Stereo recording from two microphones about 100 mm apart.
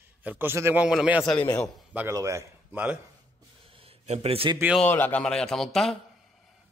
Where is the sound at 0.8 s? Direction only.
10° right (ahead or behind).